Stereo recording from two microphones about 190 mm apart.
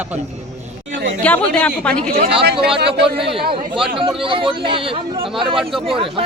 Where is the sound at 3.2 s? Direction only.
30° right (ahead or behind).